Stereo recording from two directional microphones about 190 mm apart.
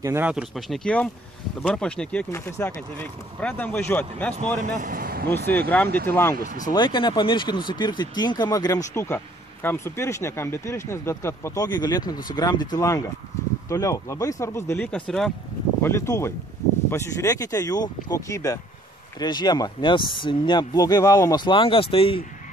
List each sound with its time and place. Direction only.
0.0 s speech: 10° right (ahead or behind); by 4.6 s 5° left (ahead or behind)
4.7 s a sound: 45° right (ahead or behind)
5.5 s speech: 10° left (ahead or behind)
6.3 s speech: 50° right (ahead or behind)
6.7 s speech: 25° left (ahead or behind); by 15.3 s centre (ahead or behind)
15.8 s speech: 15° left (ahead or behind)